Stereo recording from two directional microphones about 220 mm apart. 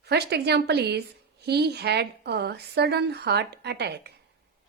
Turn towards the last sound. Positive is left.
turn(degrees=-50)  # may be behind; listen again after turning